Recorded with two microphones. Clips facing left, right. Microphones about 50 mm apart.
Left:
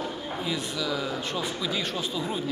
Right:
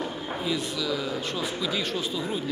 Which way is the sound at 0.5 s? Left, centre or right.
Centre.